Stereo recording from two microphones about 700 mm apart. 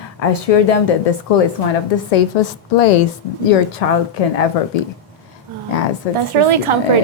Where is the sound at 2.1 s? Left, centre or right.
Left.